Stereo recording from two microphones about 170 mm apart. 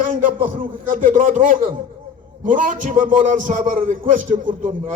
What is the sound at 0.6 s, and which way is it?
A man's voice, 50° right (ahead or behind).